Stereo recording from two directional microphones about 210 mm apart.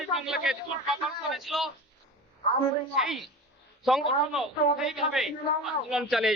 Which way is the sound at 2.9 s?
Centre (ahead or behind).